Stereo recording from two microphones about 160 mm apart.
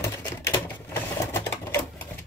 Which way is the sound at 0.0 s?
20° left (ahead or behind).